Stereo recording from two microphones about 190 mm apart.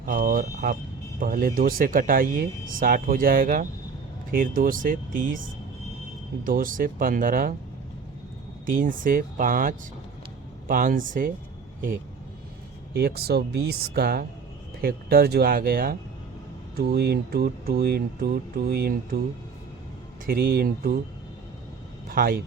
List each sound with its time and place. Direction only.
0.0 s speech: 50° right (ahead or behind)
6.4 s speech: 45° right (ahead or behind)
8.6 s speech: 45° right (ahead or behind)
12.9 s speech: 55° right (ahead or behind)
20.2 s speech: 55° right (ahead or behind)
22.1 s speech: 50° right (ahead or behind)